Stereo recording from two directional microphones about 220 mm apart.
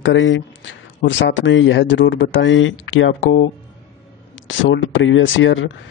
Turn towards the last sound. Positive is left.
turn(degrees=60)  # may be behind; listen again after turning